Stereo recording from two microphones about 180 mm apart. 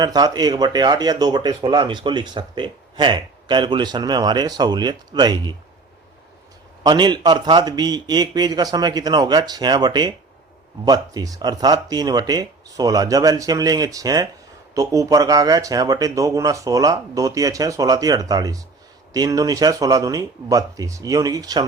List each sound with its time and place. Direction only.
0.0 s speech: 20° right (ahead or behind)
6.8 s speech: 25° right (ahead or behind)